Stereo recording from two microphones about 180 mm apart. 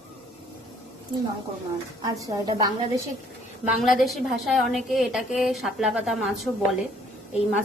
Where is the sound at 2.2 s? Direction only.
20° right (ahead or behind).